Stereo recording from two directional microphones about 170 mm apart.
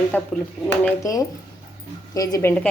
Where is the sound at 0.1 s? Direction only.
10° left (ahead or behind).